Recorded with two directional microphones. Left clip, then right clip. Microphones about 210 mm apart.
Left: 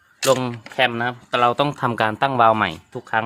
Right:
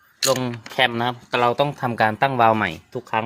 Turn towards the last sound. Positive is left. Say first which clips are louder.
# left 1 dB
turn(degrees=0)  # may be behind; listen again after turning